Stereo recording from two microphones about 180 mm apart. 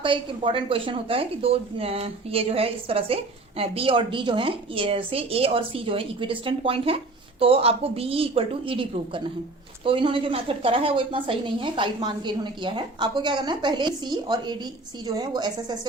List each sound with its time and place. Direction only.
0.0 s a woman's voice: 30° right (ahead or behind)